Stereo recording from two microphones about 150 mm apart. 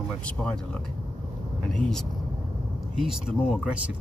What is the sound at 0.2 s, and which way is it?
Speech, 5° left (ahead or behind).